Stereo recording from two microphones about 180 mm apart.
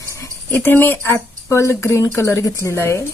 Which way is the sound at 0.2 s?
15° left (ahead or behind).